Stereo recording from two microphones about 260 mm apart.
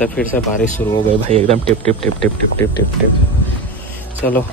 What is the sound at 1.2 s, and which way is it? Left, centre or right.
Speech, right.